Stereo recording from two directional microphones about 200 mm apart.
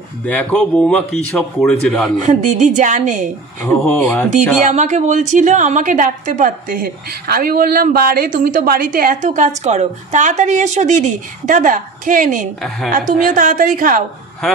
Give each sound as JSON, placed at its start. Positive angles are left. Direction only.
{"t": 0.2, "sound": "speech", "side_deg": 5}
{"t": 2.2, "sound": "a woman's voice", "side_deg": -35}
{"t": 3.6, "sound": "speech", "side_deg": 10}
{"t": 4.6, "sound": "a woman's voice", "side_deg": -35}